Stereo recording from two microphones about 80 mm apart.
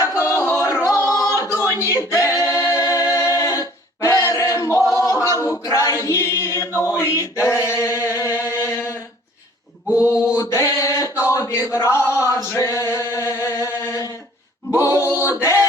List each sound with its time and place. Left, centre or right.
0.0 s music: left
0.4 s singing: left
5.0 s a capella: left
7.4 s a sound: left
8.1 s chant: left
10.0 s mantra: left
11.2 s a sound: left
12.3 s chant: left
14.8 s a sound: left
15.2 s a capella: left